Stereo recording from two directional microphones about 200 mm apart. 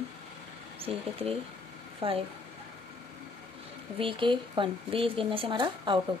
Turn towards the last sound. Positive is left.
turn(degrees=-25)  # may be behind; listen again after turning